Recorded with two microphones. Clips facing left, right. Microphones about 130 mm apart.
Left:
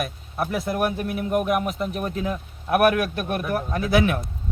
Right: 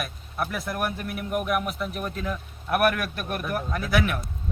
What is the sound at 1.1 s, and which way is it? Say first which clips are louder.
Speech: left 3 dB; 30° left (ahead or behind).